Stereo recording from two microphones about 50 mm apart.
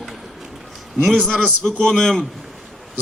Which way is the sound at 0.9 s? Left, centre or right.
Centre.